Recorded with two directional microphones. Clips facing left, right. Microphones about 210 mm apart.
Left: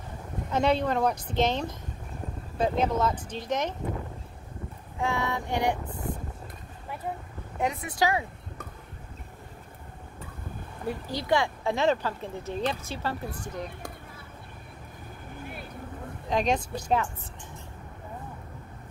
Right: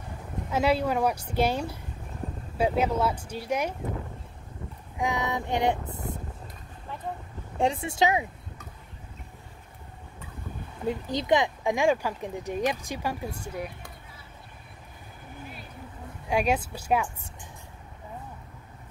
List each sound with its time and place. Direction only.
0.5 s speech: 5° right (ahead or behind)
4.9 s female singing: 15° right (ahead or behind)
7.5 s speech: 30° right (ahead or behind)
10.9 s speech: 20° right (ahead or behind)
16.3 s speech: 10° right (ahead or behind)